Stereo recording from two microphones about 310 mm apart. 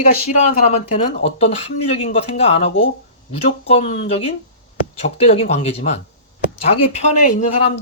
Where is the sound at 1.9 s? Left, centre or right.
Centre.